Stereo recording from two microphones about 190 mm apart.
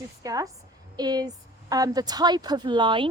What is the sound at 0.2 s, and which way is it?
A woman's voice, 20° right (ahead or behind).